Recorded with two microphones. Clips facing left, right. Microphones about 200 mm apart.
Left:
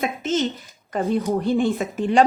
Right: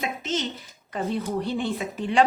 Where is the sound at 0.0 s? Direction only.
50° left (ahead or behind).